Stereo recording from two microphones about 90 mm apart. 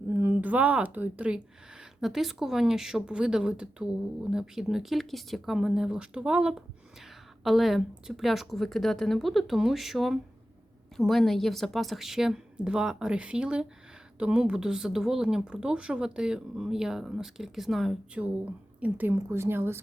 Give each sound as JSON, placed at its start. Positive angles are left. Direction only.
{"t": 0.1, "sound": "speech", "side_deg": -25}
{"t": 2.0, "sound": "speech", "side_deg": -5}
{"t": 18.8, "sound": "a woman's voice", "side_deg": -20}